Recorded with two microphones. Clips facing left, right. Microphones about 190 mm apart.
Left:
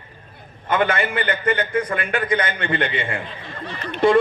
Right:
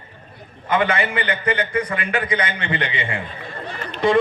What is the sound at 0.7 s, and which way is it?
A man's voice, 50° left (ahead or behind).